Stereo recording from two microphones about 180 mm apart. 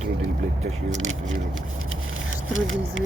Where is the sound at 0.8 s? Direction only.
90° right.